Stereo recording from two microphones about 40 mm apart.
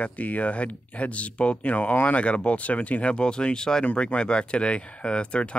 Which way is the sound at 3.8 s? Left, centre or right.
Left.